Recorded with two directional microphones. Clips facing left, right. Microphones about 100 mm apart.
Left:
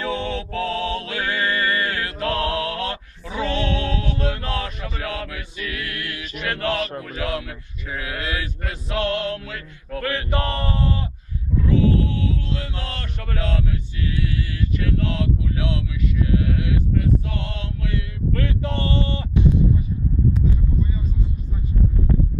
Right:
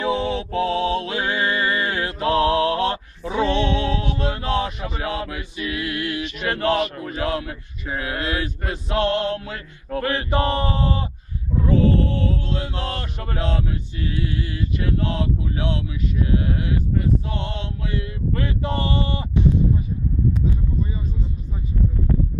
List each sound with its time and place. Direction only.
0.0 s mantra: 20° right (ahead or behind)
6.3 s speech: 30° right (ahead or behind)
11.5 s mantra: 35° right (ahead or behind); by 19.2 s 15° right (ahead or behind)